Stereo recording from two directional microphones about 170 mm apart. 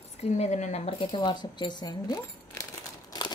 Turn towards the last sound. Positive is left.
turn(degrees=25)  # may be behind; listen again after turning